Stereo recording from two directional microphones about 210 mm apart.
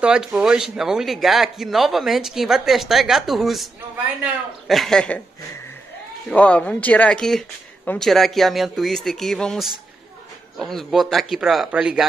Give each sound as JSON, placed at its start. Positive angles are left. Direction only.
{"t": 0.0, "sound": "a man's voice", "side_deg": -5}
{"t": 6.2, "sound": "a man's voice", "side_deg": 5}